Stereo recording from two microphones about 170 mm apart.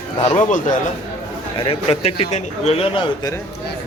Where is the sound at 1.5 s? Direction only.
30° left (ahead or behind).